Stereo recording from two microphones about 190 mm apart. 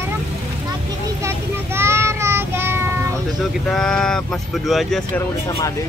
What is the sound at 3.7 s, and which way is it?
Speech, 5° left (ahead or behind).